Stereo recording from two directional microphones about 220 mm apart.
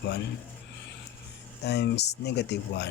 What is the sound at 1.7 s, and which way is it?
Speech, 50° left (ahead or behind).